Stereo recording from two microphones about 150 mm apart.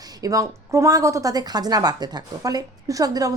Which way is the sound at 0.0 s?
25° right (ahead or behind).